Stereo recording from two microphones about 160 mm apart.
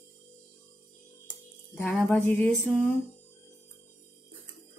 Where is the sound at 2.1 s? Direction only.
5° left (ahead or behind).